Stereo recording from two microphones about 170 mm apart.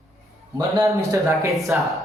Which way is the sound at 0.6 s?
20° right (ahead or behind).